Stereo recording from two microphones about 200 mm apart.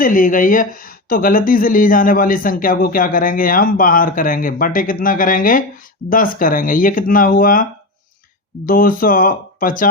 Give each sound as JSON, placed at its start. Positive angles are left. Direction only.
{"t": 0.0, "sound": "speech", "side_deg": 45}